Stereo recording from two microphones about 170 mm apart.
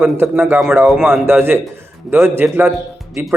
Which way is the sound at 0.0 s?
10° right (ahead or behind).